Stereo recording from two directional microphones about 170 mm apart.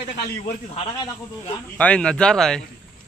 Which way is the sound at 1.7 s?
10° left (ahead or behind).